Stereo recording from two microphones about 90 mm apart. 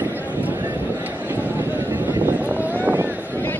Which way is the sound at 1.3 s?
25° right (ahead or behind).